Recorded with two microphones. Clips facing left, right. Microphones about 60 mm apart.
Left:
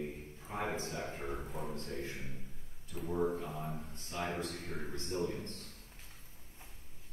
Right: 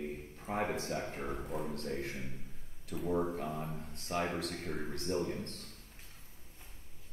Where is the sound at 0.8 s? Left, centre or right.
Right.